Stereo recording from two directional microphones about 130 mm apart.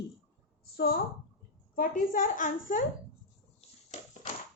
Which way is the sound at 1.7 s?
90° left.